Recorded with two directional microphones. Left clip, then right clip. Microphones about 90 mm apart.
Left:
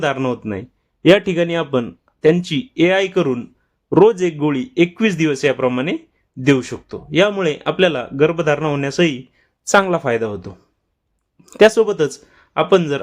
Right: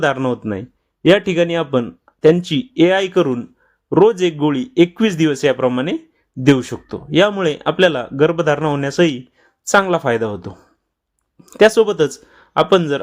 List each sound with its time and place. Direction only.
0.0 s a man's voice: 25° right (ahead or behind)
1.0 s speech: centre (ahead or behind)
1.4 s a man's voice: 25° right (ahead or behind)
3.8 s speech: centre (ahead or behind)
4.4 s a man's voice: 25° right (ahead or behind)
9.6 s speech: centre (ahead or behind)
9.9 s speech: 30° right (ahead or behind)
11.4 s speech: centre (ahead or behind)
11.9 s speech: 30° right (ahead or behind)